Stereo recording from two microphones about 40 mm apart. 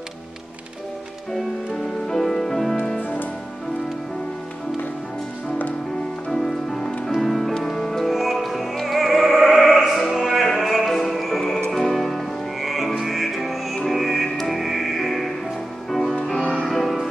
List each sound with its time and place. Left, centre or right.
2.0 s music: centre
3.0 s music: left
6.3 s music: centre